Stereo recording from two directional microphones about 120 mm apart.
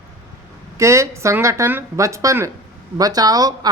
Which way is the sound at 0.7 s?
25° right (ahead or behind).